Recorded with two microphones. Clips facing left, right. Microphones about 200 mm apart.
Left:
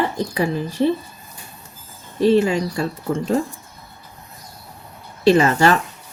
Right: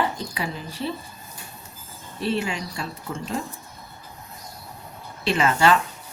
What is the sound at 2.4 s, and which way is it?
Speech, 40° left (ahead or behind).